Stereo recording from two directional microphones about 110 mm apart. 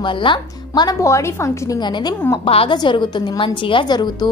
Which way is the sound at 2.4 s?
60° left (ahead or behind).